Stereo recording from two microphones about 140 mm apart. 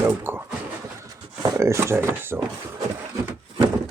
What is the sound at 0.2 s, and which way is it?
Speech, 15° right (ahead or behind).